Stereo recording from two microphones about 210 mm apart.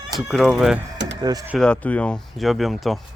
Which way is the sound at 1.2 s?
20° right (ahead or behind).